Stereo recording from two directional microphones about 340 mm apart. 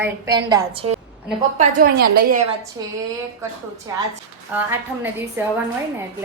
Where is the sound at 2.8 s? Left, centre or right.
Centre.